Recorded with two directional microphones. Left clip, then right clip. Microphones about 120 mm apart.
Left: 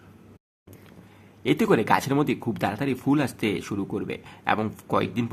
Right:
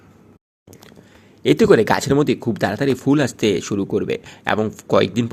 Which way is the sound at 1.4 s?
30° right (ahead or behind).